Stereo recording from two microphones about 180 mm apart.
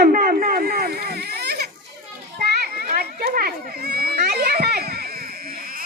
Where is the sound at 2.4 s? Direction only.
60° right (ahead or behind).